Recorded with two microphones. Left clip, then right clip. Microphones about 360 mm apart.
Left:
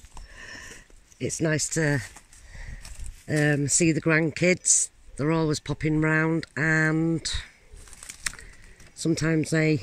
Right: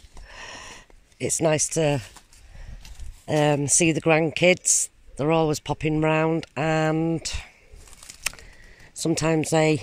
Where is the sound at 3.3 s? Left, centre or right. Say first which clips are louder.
Right 3 dB; centre.